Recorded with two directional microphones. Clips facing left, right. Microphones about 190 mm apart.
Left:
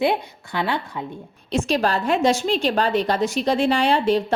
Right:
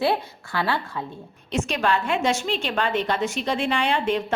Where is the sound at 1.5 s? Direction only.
35° left (ahead or behind).